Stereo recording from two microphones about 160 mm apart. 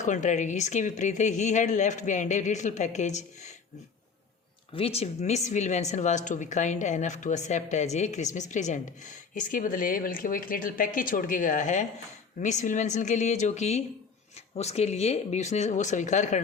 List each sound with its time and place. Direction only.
0.0 s speech: 50° left (ahead or behind)
4.7 s speech: 40° left (ahead or behind)